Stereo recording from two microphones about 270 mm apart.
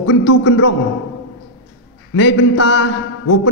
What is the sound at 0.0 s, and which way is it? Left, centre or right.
Speech, left.